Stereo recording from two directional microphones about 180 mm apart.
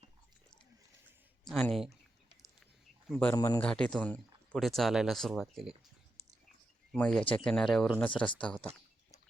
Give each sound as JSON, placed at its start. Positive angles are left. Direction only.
{"t": 1.5, "sound": "speech", "side_deg": 0}
{"t": 3.1, "sound": "a man's voice", "side_deg": 10}
{"t": 3.3, "sound": "speech", "side_deg": 20}
{"t": 3.6, "sound": "speech", "side_deg": 5}
{"t": 6.9, "sound": "speech", "side_deg": 5}